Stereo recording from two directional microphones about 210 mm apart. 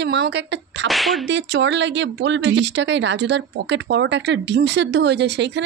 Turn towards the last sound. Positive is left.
turn(degrees=-55)  # may be behind; listen again after turning